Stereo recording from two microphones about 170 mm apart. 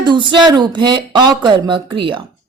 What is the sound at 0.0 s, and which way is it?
Speech, 25° right (ahead or behind).